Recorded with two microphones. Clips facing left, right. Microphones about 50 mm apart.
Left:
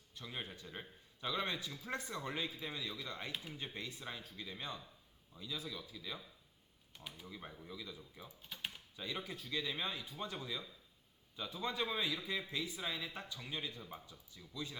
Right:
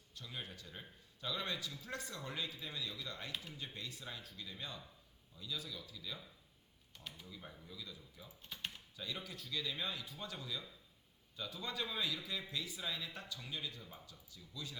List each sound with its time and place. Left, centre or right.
0.1 s a man's voice: left
6.9 s speech: centre
7.3 s a man's voice: left
8.4 s speech: centre
9.0 s a man's voice: left